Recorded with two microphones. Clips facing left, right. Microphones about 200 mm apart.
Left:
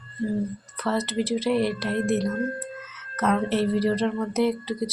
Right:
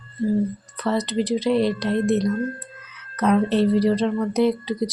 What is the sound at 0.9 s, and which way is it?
A woman's voice, 15° right (ahead or behind).